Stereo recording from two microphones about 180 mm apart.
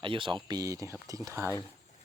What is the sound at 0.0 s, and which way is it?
Speech, 30° right (ahead or behind).